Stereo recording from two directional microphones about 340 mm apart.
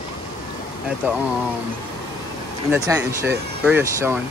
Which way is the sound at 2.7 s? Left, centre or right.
Centre.